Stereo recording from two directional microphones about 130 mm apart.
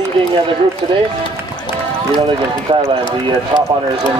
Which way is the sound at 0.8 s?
45° right (ahead or behind).